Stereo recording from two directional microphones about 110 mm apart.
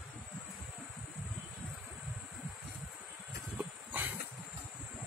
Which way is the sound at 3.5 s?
15° right (ahead or behind).